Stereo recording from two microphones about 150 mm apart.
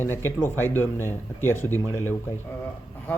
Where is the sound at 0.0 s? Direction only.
15° left (ahead or behind).